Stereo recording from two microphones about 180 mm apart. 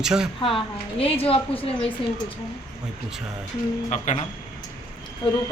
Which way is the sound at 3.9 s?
40° left (ahead or behind).